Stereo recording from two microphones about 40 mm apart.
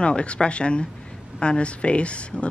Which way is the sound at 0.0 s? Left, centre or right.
Left.